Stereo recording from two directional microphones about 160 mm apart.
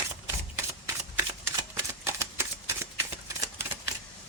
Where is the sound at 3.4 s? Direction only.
15° right (ahead or behind).